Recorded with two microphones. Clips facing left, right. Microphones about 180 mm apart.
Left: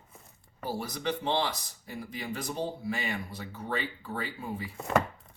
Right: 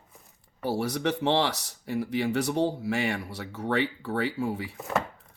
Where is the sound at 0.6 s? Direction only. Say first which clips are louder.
Right 7 dB; 75° right (ahead or behind).